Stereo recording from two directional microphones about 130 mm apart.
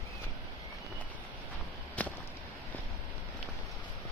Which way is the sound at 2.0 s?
10° left (ahead or behind).